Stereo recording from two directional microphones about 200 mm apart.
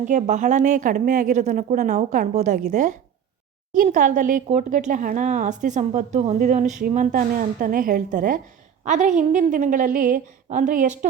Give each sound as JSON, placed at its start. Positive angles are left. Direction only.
{"t": 0.0, "sound": "speech", "side_deg": -35}